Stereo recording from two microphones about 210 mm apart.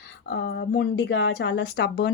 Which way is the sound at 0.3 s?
50° left (ahead or behind).